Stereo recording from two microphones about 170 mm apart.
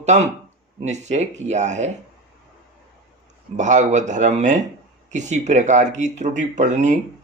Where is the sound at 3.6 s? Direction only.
45° right (ahead or behind).